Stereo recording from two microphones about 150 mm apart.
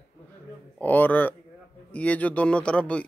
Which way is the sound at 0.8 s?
10° left (ahead or behind).